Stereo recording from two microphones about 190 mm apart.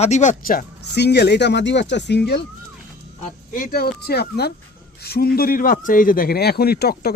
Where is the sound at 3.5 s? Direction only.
50° left (ahead or behind).